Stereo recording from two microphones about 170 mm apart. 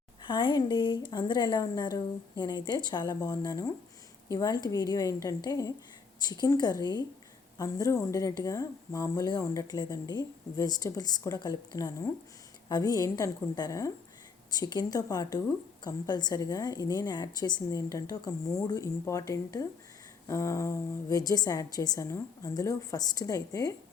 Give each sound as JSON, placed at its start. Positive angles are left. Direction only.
{"t": 0.2, "sound": "speech", "side_deg": 30}